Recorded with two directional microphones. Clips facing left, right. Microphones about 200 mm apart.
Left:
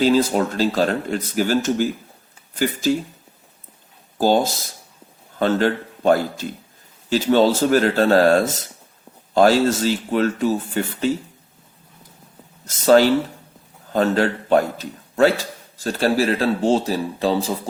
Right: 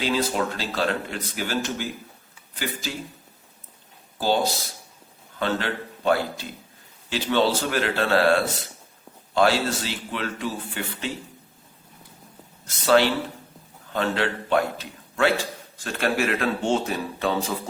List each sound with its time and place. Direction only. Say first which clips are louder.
0.0 s speech: left 8 dB; 45° left (ahead or behind)
4.2 s a man's voice: left 5 dB; 45° left (ahead or behind)
12.6 s a man's voice: left 6 dB; 40° left (ahead or behind)